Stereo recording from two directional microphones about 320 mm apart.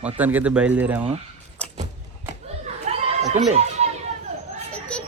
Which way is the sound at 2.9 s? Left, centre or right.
Right.